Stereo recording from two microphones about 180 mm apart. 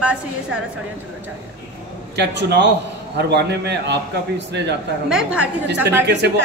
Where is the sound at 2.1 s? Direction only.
70° right (ahead or behind).